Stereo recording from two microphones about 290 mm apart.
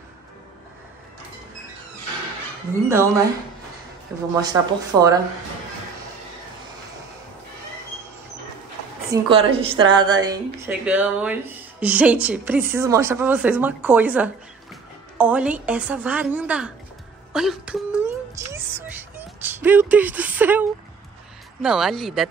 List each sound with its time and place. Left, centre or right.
2.9 s speech: centre
4.4 s speech: centre
9.1 s a woman's voice: centre
17.3 s music: centre
21.6 s speech: centre